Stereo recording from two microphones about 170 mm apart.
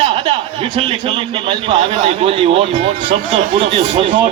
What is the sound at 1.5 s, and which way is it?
Speech, 30° right (ahead or behind).